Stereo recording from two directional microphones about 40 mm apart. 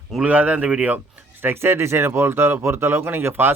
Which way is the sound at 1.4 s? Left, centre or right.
Right.